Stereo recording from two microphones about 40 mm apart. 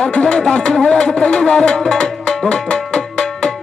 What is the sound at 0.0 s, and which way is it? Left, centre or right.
Music, left.